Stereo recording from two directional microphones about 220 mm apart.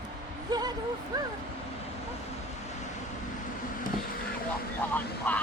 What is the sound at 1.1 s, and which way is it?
Speech, 15° right (ahead or behind).